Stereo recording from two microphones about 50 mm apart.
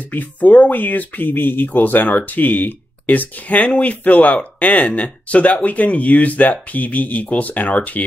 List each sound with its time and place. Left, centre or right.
0.1 s speech: left